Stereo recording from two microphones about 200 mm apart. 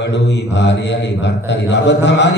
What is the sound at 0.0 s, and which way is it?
A man's voice, 60° left (ahead or behind).